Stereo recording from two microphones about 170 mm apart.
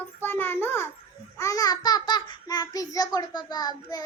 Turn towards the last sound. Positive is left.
turn(degrees=25)  # may be behind; listen again after turning